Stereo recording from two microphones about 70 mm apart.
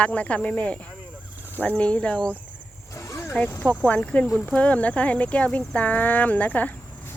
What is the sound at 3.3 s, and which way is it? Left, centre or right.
Speech, left.